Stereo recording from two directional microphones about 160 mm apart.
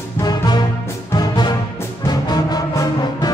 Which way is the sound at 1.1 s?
25° left (ahead or behind).